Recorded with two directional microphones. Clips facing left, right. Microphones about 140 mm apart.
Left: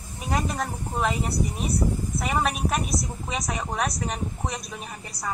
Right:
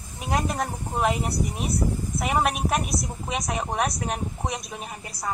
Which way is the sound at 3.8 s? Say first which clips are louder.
Right 1 dB; 5° right (ahead or behind).